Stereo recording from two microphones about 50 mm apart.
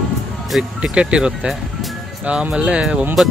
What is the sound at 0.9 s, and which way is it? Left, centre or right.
Speech, right.